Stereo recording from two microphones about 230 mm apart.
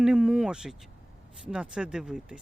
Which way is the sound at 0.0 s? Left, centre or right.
Centre.